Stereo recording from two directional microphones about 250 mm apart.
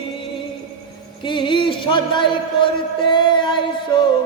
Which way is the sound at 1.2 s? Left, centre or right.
Centre.